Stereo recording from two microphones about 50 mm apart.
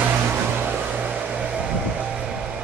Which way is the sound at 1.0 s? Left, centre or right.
Right.